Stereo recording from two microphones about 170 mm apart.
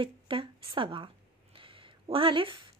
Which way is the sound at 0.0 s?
30° right (ahead or behind).